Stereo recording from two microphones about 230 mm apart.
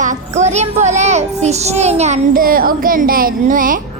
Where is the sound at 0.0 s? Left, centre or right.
Right.